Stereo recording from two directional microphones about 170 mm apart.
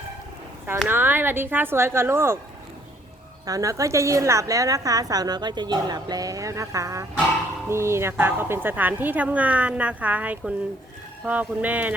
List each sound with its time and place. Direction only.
0.9 s speech: 10° right (ahead or behind)
3.4 s a woman's voice: 20° right (ahead or behind)